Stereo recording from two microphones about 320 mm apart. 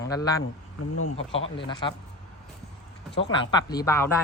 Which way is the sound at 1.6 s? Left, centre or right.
Centre.